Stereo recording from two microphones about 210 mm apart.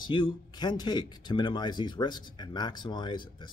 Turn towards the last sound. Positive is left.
turn(degrees=20)  # may be behind; listen again after turning